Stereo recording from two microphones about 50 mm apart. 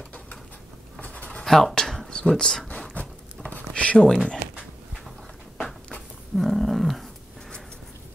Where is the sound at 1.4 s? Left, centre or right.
Centre.